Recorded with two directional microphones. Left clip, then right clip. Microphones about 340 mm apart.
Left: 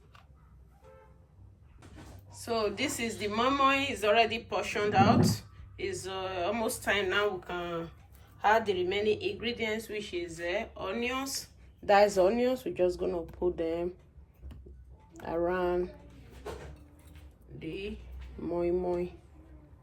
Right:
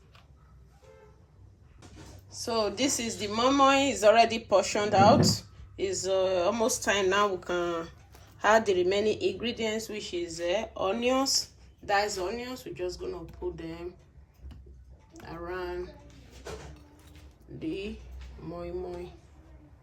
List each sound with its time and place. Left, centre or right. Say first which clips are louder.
2.3 s a woman's voice: right 2 dB; centre
11.9 s speech: left 5 dB; centre
15.1 s speech: left 7 dB; centre
17.6 s a woman's voice: right 4 dB; centre
18.4 s speech: left 7 dB; centre